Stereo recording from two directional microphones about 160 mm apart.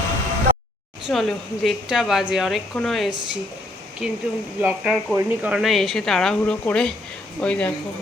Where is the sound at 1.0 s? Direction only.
Centre (ahead or behind).